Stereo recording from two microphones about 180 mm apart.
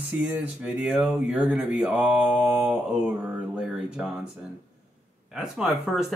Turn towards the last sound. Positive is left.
turn(degrees=-5)  # may be behind; listen again after turning